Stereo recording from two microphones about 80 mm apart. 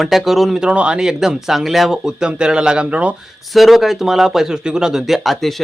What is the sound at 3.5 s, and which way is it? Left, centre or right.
Speech, centre.